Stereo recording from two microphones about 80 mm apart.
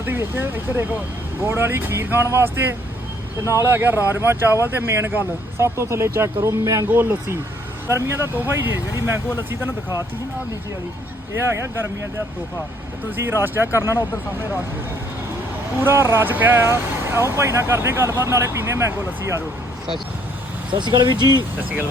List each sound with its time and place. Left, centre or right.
0.0 s speech: right
6.9 s speech: right
13.1 s speech: right
15.8 s speech: right
20.7 s speech: right